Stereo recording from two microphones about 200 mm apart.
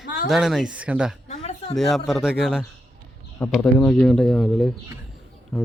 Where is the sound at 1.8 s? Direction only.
Centre (ahead or behind).